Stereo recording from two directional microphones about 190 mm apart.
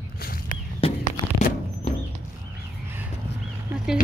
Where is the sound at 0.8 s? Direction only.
30° left (ahead or behind).